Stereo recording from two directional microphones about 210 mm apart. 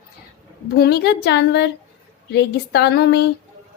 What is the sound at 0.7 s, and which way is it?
Speech, 50° left (ahead or behind).